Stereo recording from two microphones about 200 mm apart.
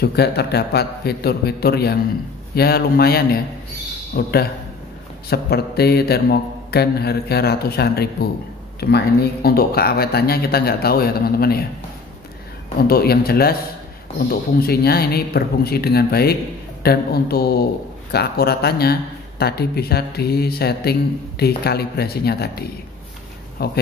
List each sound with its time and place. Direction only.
0.0 s speech: 55° left (ahead or behind)
12.7 s speech: 50° left (ahead or behind)
14.6 s speech: 50° left (ahead or behind)